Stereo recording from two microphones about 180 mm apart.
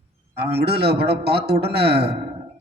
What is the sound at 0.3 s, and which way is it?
A man's voice, 65° right (ahead or behind).